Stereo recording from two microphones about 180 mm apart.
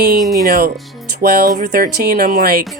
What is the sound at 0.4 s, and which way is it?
Speech, 55° right (ahead or behind).